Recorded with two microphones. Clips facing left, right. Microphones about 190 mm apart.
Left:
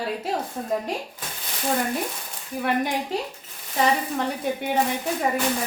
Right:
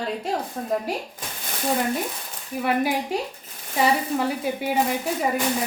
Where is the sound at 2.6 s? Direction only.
5° right (ahead or behind).